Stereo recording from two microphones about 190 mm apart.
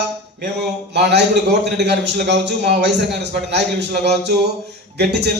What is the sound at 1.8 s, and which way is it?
A man's voice, 60° right (ahead or behind).